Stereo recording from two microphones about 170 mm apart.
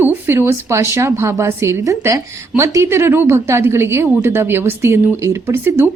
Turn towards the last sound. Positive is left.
turn(degrees=-15)  # may be behind; listen again after turning